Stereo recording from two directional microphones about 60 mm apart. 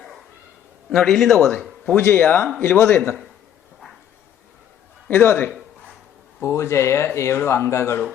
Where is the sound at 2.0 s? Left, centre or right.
Left.